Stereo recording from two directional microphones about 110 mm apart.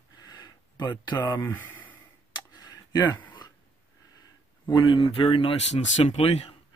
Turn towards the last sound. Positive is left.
turn(degrees=70)  # may be behind; listen again after turning